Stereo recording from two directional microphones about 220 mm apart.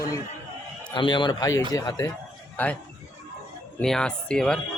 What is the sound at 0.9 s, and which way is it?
A man's voice, 20° left (ahead or behind).